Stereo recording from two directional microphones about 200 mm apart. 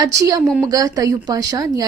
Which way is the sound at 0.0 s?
15° right (ahead or behind).